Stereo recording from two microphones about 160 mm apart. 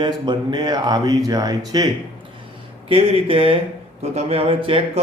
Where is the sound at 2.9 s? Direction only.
40° right (ahead or behind).